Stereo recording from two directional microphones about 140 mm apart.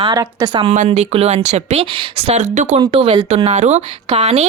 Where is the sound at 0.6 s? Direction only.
45° right (ahead or behind).